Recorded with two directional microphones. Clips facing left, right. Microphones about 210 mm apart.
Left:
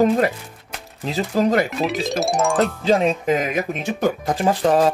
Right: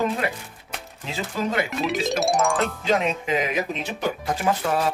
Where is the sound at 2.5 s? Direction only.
30° left (ahead or behind); by 4.5 s 45° left (ahead or behind).